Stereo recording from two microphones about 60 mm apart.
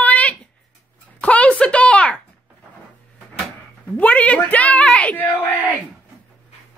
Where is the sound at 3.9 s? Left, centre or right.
Left.